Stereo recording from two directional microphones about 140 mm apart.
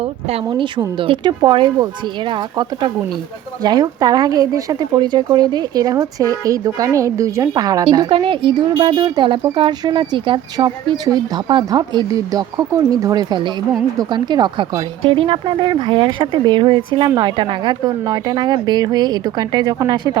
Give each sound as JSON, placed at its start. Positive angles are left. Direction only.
{"t": 0.0, "sound": "speech", "side_deg": -45}